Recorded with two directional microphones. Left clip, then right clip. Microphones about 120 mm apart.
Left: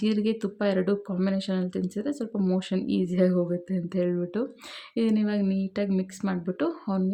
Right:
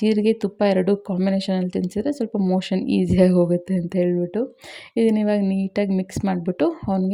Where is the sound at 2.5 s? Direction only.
45° right (ahead or behind).